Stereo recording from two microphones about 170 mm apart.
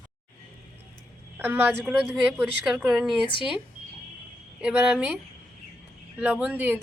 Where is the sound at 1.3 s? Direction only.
10° right (ahead or behind).